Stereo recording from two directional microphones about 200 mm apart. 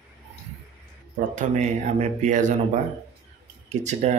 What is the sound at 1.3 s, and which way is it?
Speech, 35° right (ahead or behind).